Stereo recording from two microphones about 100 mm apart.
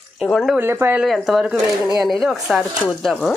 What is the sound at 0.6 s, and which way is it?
Speech, 25° right (ahead or behind).